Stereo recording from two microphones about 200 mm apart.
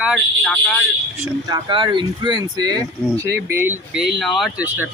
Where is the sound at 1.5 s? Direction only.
20° right (ahead or behind).